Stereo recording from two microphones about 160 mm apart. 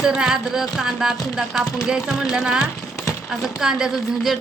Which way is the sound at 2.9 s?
20° left (ahead or behind).